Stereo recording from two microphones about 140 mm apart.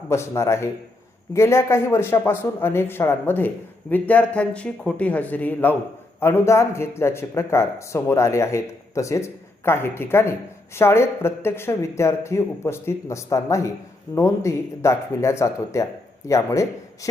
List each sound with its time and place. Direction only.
0.1 s a man's voice: 20° left (ahead or behind)